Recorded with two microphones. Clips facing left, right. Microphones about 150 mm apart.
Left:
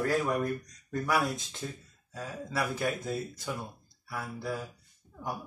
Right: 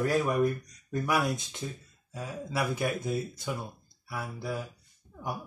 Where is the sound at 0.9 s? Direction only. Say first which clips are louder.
Right 1 dB; 15° right (ahead or behind).